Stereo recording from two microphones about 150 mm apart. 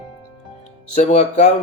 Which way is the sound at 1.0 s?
45° left (ahead or behind).